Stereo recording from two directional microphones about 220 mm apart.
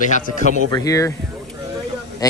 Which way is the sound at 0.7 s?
15° left (ahead or behind).